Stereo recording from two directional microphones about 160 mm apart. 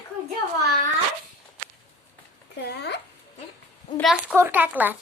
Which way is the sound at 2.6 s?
90° left.